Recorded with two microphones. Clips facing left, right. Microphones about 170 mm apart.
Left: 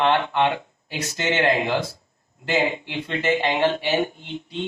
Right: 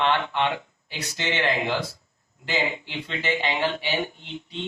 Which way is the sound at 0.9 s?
45° left (ahead or behind).